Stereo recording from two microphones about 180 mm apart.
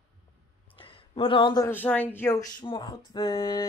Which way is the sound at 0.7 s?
30° left (ahead or behind).